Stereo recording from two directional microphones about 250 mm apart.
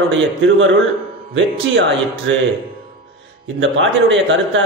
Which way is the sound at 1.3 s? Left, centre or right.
Right.